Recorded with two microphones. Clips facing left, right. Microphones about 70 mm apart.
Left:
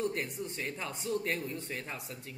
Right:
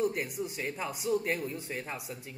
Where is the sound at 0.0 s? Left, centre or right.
Centre.